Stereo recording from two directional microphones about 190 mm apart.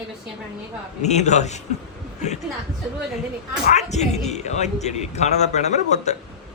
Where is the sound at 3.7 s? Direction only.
35° left (ahead or behind).